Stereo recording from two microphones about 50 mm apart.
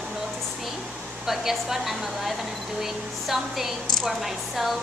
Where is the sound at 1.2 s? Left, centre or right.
Centre.